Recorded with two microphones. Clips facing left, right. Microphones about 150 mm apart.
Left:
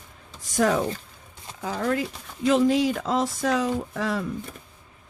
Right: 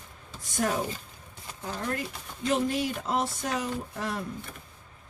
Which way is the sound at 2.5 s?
90° left.